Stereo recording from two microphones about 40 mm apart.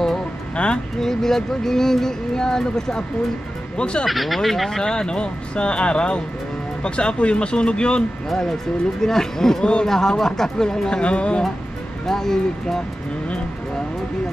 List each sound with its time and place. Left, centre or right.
0.6 s speech: left
1.0 s speech: centre
3.7 s speech: left
4.1 s speech: centre; by 8.0 s left
9.0 s speech: centre; by 11.4 s left
12.1 s speech: centre